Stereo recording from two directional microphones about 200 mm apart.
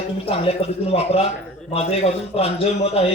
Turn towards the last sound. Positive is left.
turn(degrees=30)  # may be behind; listen again after turning